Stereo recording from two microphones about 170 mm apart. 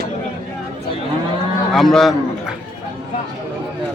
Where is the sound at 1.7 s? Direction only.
Centre (ahead or behind).